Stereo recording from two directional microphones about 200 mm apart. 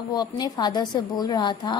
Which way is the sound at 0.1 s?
20° left (ahead or behind).